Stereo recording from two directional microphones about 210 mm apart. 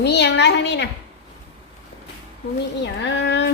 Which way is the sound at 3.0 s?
55° left (ahead or behind).